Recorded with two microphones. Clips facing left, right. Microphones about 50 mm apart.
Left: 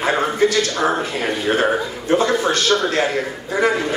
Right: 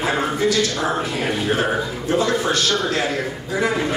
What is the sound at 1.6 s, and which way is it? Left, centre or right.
A man's voice, left.